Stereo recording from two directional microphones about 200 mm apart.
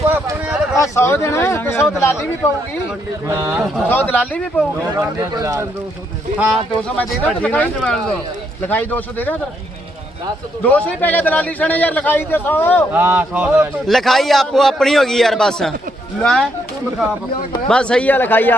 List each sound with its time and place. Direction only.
0.1 s a sound: 10° right (ahead or behind)
0.8 s a man's voice: 10° left (ahead or behind)
3.2 s speech: 15° right (ahead or behind)
3.8 s a man's voice: 10° left (ahead or behind)
4.9 s speech: 15° right (ahead or behind)
6.8 s a man's voice: 5° left (ahead or behind)
10.6 s a man's voice: 10° left (ahead or behind)
12.9 s a man's voice: 10° right (ahead or behind)
17.7 s a man's voice: 5° left (ahead or behind)